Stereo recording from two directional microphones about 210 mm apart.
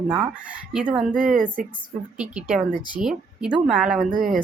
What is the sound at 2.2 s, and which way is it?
Speech, 5° right (ahead or behind).